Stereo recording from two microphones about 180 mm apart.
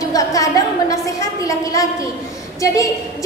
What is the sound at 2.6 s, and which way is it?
Speech, 20° left (ahead or behind).